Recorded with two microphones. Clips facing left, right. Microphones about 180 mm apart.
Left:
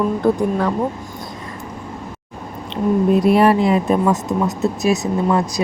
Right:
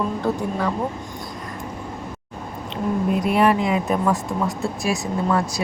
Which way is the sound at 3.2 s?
35° left (ahead or behind).